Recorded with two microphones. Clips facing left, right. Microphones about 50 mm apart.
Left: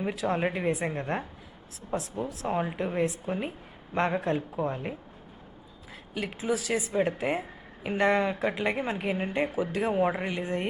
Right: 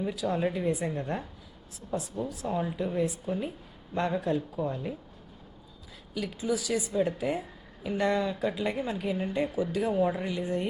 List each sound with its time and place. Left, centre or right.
0.0 s speech: left
6.1 s speech: left